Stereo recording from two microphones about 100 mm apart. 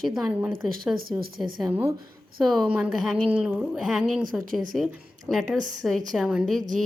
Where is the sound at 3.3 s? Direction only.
15° right (ahead or behind); by 6.3 s centre (ahead or behind).